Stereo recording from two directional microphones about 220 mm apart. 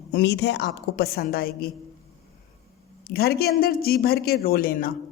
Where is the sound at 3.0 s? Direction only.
45° left (ahead or behind).